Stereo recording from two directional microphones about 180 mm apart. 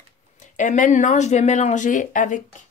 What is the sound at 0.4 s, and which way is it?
Speech, 45° left (ahead or behind).